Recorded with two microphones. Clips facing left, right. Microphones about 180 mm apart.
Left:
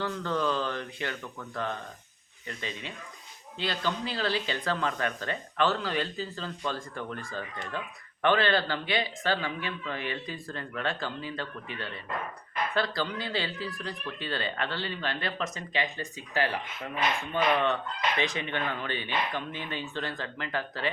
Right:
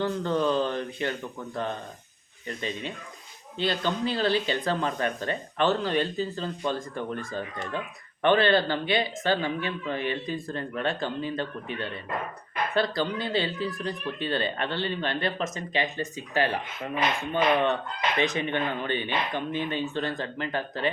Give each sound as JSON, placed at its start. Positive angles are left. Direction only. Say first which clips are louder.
{"t": 0.0, "sound": "speech", "louder": "right 4 dB", "side_deg": -20}
{"t": 3.6, "sound": "speech", "louder": "right 4 dB", "side_deg": -20}